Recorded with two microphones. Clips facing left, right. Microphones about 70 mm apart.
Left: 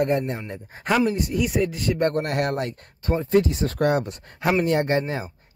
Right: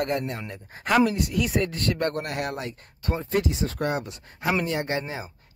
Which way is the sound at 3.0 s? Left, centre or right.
Left.